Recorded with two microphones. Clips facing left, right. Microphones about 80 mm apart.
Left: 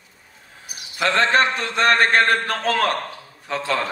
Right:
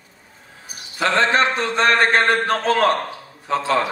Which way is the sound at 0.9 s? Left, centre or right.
Right.